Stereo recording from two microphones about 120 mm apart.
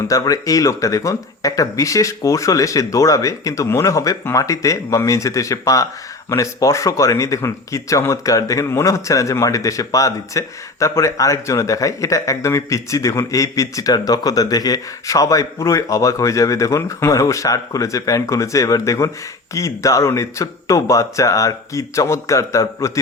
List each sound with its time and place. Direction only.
0.1 s speech: 30° left (ahead or behind)